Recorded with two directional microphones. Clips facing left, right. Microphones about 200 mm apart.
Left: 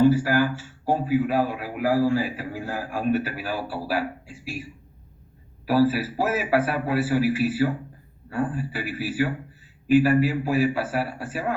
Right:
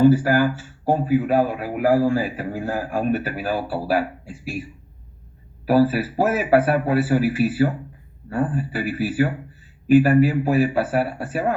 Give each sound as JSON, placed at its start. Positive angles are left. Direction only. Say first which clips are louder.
{"t": 0.2, "sound": "a man's voice", "louder": "right 3 dB", "side_deg": -45}
{"t": 5.6, "sound": "a man's voice", "louder": "right 3 dB", "side_deg": -45}